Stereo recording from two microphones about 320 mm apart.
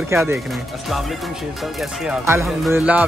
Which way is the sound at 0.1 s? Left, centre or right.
Centre.